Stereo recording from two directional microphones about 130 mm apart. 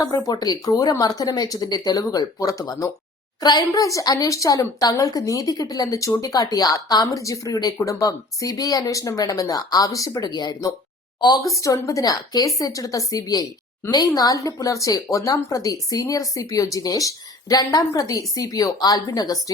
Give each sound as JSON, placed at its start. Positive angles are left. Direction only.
{"t": 0.3, "sound": "a woman's voice", "side_deg": 30}